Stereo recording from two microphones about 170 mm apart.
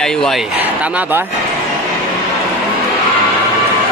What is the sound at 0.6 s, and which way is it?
Speech, 10° right (ahead or behind).